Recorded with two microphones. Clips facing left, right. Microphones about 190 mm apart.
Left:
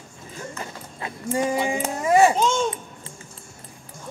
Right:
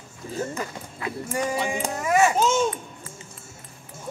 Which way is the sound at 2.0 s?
30° left (ahead or behind).